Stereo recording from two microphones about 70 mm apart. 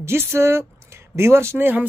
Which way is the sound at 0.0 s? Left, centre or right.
Right.